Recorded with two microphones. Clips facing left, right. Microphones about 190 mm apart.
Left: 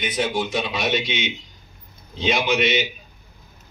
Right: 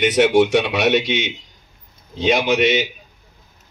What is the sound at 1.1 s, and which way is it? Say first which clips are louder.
A man's voice: right 5 dB; 45° right (ahead or behind).